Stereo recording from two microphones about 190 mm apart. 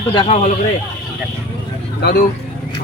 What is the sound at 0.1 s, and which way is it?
Speech, 25° left (ahead or behind).